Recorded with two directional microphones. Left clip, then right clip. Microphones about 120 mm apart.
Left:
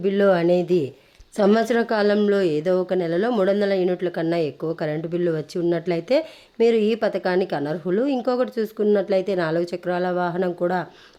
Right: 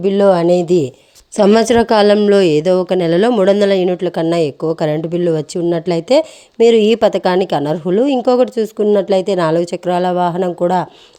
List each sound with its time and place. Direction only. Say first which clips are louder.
0.0 s a woman's voice: right 7 dB; 45° right (ahead or behind)
1.4 s speech: right 8 dB; 60° right (ahead or behind)
3.8 s a woman's voice: right 7 dB; 45° right (ahead or behind)